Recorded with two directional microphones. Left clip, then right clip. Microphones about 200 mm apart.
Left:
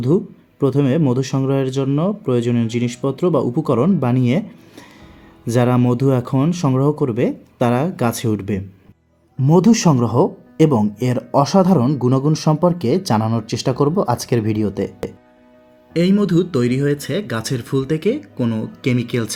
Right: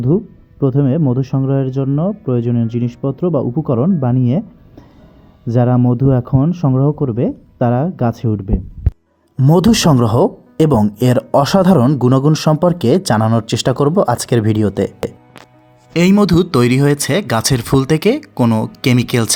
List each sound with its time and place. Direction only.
0.1 s speech: 10° right (ahead or behind)
5.5 s speech: 15° right (ahead or behind)
15.9 s speech: 40° right (ahead or behind)